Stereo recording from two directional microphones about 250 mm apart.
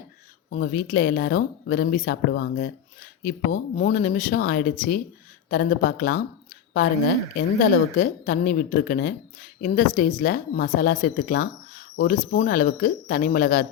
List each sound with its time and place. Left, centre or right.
0.5 s speech: left